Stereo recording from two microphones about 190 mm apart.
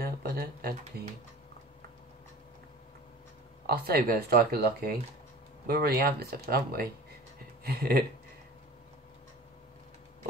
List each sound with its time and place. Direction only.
0.0 s speech: 55° right (ahead or behind)
3.6 s speech: 55° right (ahead or behind)